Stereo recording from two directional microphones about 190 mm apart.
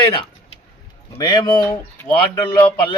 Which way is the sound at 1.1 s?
25° left (ahead or behind).